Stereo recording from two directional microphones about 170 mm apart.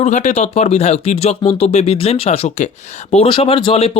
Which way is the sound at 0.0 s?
45° left (ahead or behind).